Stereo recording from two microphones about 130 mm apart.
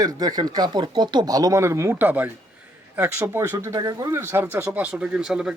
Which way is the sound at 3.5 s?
30° right (ahead or behind).